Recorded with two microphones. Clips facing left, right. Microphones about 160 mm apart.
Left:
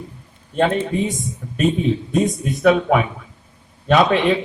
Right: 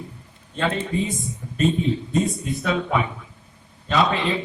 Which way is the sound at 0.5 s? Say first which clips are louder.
Left 6 dB; 65° left (ahead or behind).